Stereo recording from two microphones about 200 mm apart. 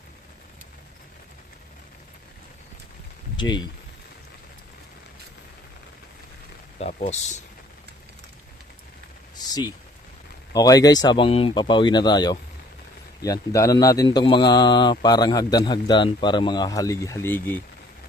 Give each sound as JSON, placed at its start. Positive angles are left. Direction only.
{"t": 3.3, "sound": "speech", "side_deg": 20}
{"t": 6.7, "sound": "speech", "side_deg": 30}
{"t": 9.5, "sound": "speech", "side_deg": 20}